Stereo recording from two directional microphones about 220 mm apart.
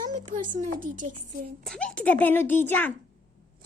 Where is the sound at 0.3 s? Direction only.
90° right.